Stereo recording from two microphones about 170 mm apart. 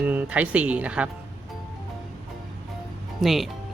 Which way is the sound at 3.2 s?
Centre (ahead or behind).